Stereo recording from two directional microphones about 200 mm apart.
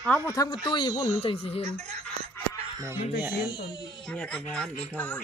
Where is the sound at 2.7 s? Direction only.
15° right (ahead or behind).